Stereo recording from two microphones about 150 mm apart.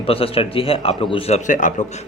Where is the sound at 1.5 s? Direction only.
60° left (ahead or behind).